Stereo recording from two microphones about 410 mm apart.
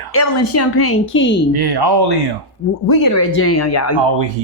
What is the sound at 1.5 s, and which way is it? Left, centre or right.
Speech, right.